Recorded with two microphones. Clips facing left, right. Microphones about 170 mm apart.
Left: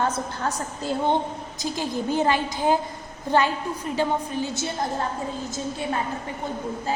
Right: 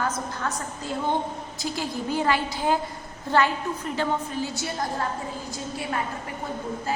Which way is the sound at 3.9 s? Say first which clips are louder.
Left 3 dB; 15° left (ahead or behind).